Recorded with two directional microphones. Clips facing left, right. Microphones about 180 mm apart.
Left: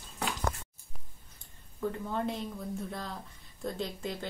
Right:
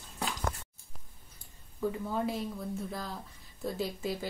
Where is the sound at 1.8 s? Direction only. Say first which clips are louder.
Right 1 dB; 5° right (ahead or behind).